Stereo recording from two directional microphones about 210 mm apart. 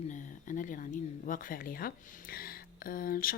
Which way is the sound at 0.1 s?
35° left (ahead or behind).